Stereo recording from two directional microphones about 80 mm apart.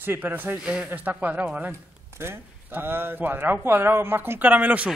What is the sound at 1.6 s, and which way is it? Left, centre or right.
Speech, right.